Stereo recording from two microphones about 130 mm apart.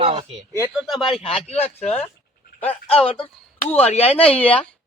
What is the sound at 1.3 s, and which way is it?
Speech, 50° left (ahead or behind).